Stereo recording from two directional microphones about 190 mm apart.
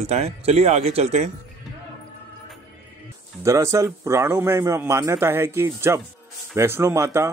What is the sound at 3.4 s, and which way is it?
A man's voice, 15° right (ahead or behind).